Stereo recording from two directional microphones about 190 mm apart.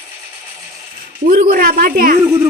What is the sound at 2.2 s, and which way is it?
Speech, 10° right (ahead or behind).